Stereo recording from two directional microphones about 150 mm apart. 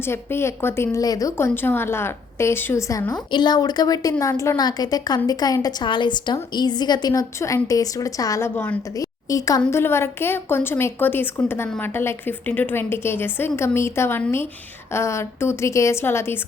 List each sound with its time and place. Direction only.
0.0 s a woman's voice: 15° left (ahead or behind)
3.3 s a woman's voice: 30° left (ahead or behind); by 8.8 s 10° left (ahead or behind)
9.0 s a woman's voice: 25° left (ahead or behind)